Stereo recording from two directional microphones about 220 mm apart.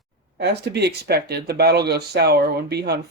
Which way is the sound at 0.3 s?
50° right (ahead or behind).